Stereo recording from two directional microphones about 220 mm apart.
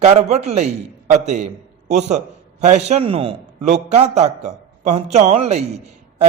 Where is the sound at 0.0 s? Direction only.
30° right (ahead or behind).